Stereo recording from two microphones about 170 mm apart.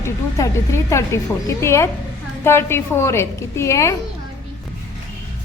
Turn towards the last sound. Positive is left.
turn(degrees=15)  # may be behind; listen again after turning